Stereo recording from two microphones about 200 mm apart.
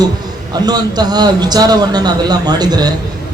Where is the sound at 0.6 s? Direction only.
20° right (ahead or behind).